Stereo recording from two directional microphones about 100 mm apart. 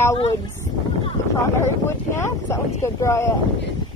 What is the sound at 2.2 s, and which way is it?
Speech, 30° left (ahead or behind).